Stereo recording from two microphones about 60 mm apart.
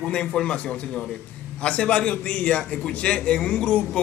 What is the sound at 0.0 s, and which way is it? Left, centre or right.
A man's voice, centre.